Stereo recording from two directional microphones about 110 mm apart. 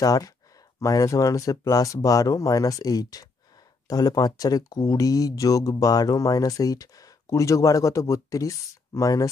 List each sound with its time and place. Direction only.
0.0 s speech: 35° left (ahead or behind)